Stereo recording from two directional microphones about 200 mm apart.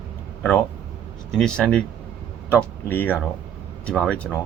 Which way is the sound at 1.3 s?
5° left (ahead or behind).